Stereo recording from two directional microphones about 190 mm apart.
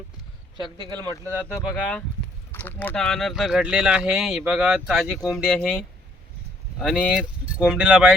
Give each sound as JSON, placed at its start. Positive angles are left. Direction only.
{"t": 0.8, "sound": "speech", "side_deg": -20}
{"t": 1.7, "sound": "speech", "side_deg": 5}